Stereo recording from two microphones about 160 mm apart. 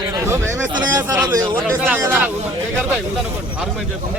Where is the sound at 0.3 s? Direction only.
15° right (ahead or behind).